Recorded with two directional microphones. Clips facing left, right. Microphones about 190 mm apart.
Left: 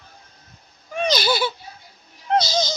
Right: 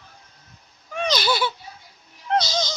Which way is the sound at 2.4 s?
10° left (ahead or behind).